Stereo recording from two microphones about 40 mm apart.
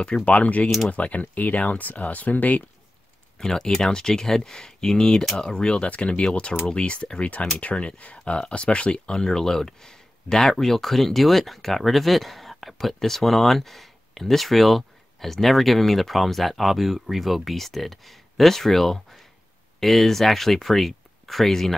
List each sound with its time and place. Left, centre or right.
0.0 s speech: left
3.3 s speech: centre